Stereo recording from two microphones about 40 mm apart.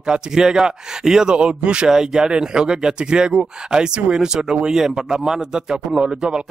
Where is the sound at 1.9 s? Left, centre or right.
Centre.